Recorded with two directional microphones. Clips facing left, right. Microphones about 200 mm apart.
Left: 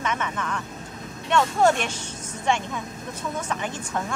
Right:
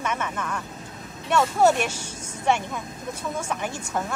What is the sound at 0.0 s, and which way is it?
A woman's voice, 10° right (ahead or behind).